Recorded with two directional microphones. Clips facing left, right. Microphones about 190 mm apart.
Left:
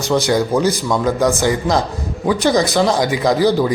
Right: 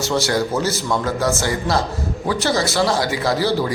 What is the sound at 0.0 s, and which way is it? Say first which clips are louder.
A man's voice: left 4 dB; 15° left (ahead or behind).